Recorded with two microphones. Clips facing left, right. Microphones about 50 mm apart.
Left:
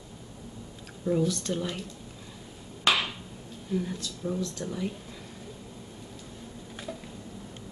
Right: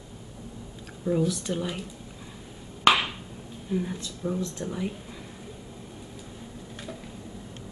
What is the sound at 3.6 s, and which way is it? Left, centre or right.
Speech, centre.